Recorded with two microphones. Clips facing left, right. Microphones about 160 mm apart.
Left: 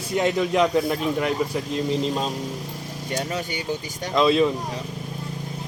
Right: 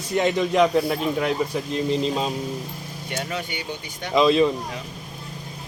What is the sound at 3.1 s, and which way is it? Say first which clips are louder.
Speech: left 2 dB; 40° left (ahead or behind).